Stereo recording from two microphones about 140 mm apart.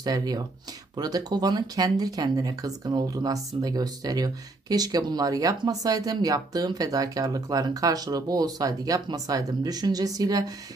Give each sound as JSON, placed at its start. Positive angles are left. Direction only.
{"t": 0.0, "sound": "speech", "side_deg": -30}